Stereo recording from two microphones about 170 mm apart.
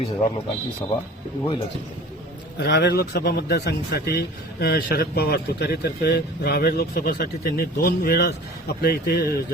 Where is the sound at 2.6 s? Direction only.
85° left.